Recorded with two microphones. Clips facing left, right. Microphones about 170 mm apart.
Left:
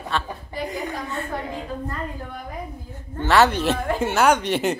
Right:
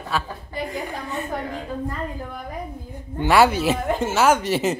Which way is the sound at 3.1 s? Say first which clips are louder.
Right 1 dB; 10° right (ahead or behind).